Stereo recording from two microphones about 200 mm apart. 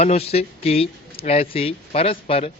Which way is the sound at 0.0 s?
30° left (ahead or behind).